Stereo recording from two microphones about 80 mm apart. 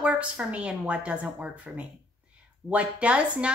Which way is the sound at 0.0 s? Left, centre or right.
Centre.